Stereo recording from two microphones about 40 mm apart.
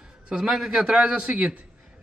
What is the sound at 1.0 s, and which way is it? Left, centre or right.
Speech, right.